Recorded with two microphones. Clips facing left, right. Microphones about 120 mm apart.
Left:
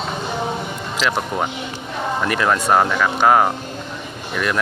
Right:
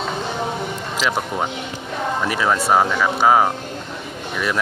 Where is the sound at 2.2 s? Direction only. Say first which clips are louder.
Left 2 dB; 5° right (ahead or behind).